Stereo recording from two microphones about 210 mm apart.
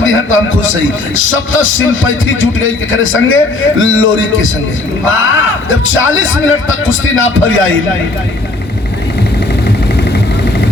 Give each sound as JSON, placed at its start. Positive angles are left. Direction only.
{"t": 0.0, "sound": "a man's voice", "side_deg": 70}